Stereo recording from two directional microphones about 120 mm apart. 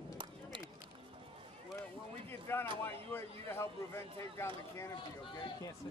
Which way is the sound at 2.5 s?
20° left (ahead or behind).